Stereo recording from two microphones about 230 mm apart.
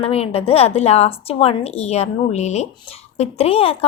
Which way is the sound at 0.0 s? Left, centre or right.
Left.